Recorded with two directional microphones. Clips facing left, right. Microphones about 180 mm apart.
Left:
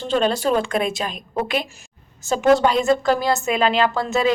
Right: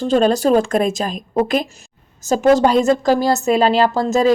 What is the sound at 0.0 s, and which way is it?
A woman's voice, 40° right (ahead or behind).